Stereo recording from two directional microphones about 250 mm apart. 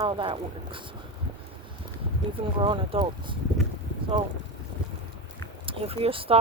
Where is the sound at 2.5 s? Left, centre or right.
Centre.